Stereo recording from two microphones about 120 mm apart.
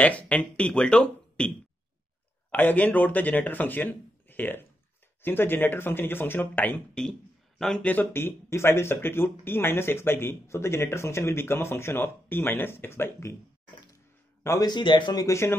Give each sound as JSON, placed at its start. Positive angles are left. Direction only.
{"t": 0.0, "sound": "speech", "side_deg": 10}
{"t": 2.5, "sound": "speech", "side_deg": 15}
{"t": 14.4, "sound": "speech", "side_deg": 25}
{"t": 14.7, "sound": "speech", "side_deg": 40}
{"t": 15.2, "sound": "speech", "side_deg": 25}